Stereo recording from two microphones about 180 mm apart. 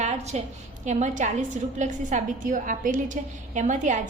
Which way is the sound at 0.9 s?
40° right (ahead or behind).